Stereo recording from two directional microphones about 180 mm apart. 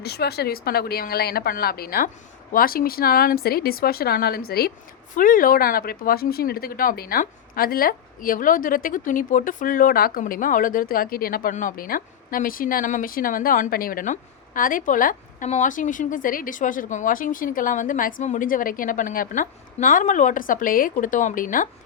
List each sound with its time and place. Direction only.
0.0 s speech: 65° left (ahead or behind); by 21.7 s 50° left (ahead or behind)